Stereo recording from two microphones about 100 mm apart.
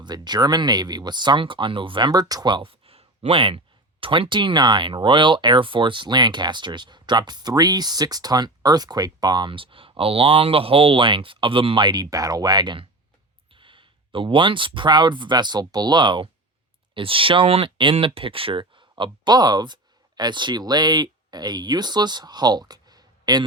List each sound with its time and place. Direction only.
0.0 s speech: 45° right (ahead or behind)